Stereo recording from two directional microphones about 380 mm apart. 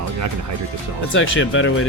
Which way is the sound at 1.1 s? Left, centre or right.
Left.